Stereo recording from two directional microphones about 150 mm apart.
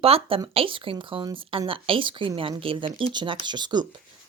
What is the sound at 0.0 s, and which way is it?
Speech, 40° right (ahead or behind).